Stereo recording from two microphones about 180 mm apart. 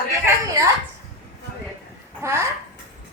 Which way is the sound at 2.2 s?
15° right (ahead or behind).